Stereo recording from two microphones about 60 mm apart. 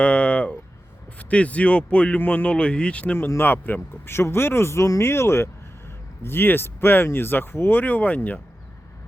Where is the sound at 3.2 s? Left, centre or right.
Left.